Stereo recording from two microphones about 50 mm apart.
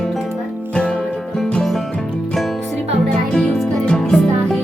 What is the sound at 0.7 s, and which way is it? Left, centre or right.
Music, left.